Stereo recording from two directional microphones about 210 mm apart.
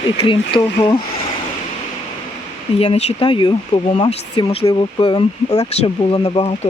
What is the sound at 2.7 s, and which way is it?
Speech, 30° left (ahead or behind).